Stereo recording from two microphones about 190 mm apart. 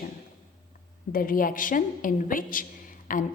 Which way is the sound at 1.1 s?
50° left (ahead or behind).